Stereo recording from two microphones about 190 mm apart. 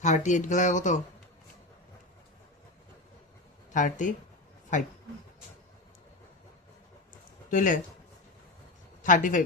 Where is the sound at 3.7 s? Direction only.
40° left (ahead or behind).